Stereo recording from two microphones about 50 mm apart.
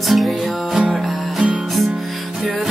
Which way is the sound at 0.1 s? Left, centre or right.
Centre.